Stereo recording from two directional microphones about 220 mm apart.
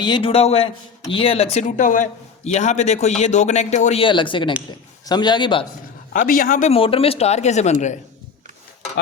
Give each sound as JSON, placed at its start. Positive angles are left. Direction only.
{"t": 0.0, "sound": "a man's voice", "side_deg": 20}
{"t": 6.1, "sound": "a man's voice", "side_deg": 40}